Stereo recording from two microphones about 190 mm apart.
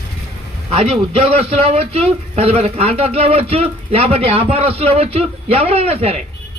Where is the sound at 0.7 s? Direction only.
30° right (ahead or behind).